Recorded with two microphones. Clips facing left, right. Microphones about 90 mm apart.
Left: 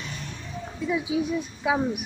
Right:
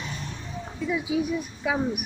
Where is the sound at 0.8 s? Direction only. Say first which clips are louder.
Even; 20° left (ahead or behind).